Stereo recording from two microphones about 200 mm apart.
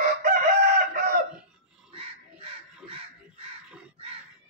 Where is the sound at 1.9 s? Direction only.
25° right (ahead or behind).